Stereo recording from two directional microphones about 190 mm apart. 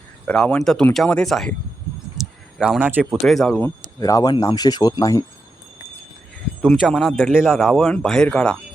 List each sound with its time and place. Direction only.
0.3 s speech: 5° left (ahead or behind)
2.1 s a sound: centre (ahead or behind)
3.2 s speech: centre (ahead or behind); by 5.2 s 20° left (ahead or behind)
6.6 s speech: centre (ahead or behind)